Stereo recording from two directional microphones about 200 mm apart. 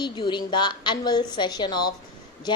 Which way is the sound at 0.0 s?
20° left (ahead or behind).